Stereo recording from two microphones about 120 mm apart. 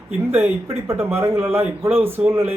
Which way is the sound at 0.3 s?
15° right (ahead or behind).